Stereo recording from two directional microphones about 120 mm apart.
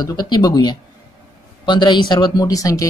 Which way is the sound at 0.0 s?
35° left (ahead or behind).